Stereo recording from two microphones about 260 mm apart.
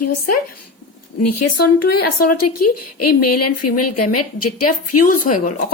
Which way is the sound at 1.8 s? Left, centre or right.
Left.